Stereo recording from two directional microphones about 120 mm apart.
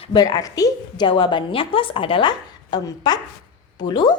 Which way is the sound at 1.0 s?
45° left (ahead or behind).